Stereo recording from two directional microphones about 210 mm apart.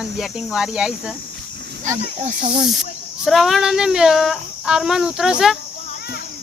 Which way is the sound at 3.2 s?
Centre (ahead or behind).